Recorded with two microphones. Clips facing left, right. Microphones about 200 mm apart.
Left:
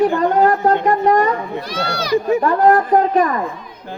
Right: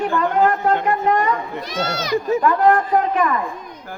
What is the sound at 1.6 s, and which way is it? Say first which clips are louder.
Speech: left 1 dB; 20° right (ahead or behind).